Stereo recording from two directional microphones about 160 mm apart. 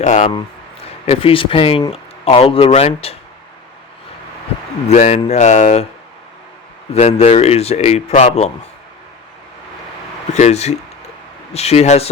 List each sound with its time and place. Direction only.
0.0 s speech: 50° left (ahead or behind)
1.0 s speech: 35° left (ahead or behind)
4.9 s speech: 45° left (ahead or behind)
6.9 s speech: 40° left (ahead or behind)
10.3 s speech: 45° left (ahead or behind)